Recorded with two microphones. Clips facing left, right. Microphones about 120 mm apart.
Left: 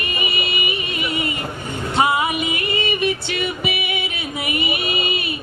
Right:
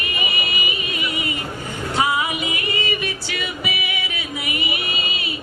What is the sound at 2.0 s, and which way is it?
Music, 25° left (ahead or behind).